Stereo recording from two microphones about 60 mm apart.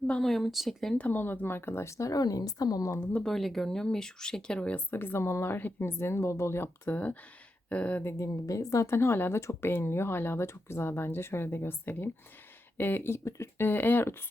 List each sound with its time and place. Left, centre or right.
0.2 s speech: centre
0.9 s speech: left
3.2 s speech: centre
4.9 s speech: left
6.8 s speech: left
8.0 s speech: left
8.9 s speech: left